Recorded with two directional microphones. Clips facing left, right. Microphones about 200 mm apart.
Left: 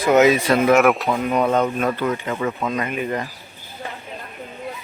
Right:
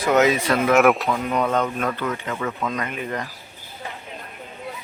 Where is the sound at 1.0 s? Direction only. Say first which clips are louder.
Left 3 dB; 20° left (ahead or behind).